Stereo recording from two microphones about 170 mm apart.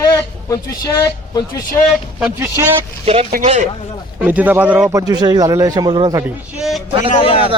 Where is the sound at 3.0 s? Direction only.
35° right (ahead or behind).